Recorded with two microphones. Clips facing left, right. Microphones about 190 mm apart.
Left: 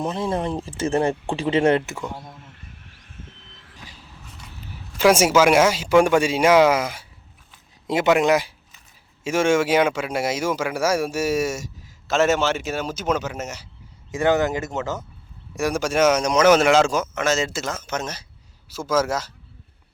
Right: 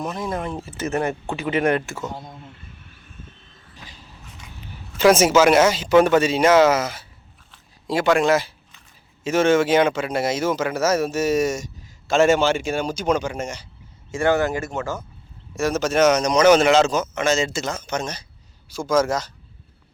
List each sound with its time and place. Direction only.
0.0 s speech: 30° left (ahead or behind)
3.0 s vehicle: 85° left
4.9 s a man's voice: 10° left (ahead or behind)
14.1 s a man's voice: 20° left (ahead or behind)